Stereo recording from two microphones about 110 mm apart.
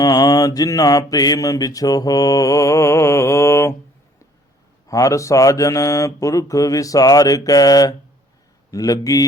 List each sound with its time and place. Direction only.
0.0 s mantra: 35° left (ahead or behind)
4.9 s speech: 30° left (ahead or behind)